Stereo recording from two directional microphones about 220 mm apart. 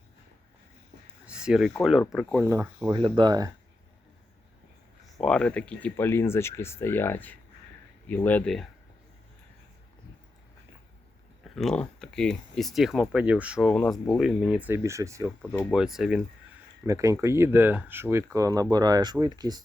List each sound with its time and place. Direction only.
1.2 s a sound: 5° right (ahead or behind)
1.8 s speech: centre (ahead or behind)
2.4 s speech: 15° right (ahead or behind)
5.2 s speech: 5° left (ahead or behind)
11.4 s speech: centre (ahead or behind)
15.4 s speech: centre (ahead or behind)
16.8 s speech: 15° right (ahead or behind)